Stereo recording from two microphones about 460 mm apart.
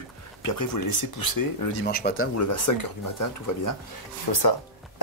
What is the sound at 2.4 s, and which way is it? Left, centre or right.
Speech, left.